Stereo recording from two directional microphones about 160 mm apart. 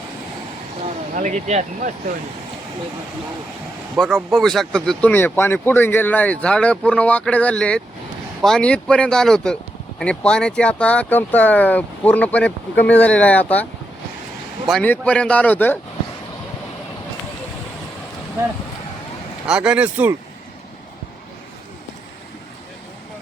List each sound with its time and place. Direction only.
1.1 s speech: 50° right (ahead or behind)
3.9 s speech: centre (ahead or behind)
14.7 s speech: 10° left (ahead or behind)
19.5 s speech: 5° right (ahead or behind)